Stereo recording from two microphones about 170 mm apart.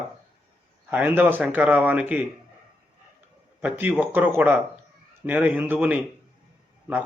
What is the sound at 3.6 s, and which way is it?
A man's voice, 10° right (ahead or behind).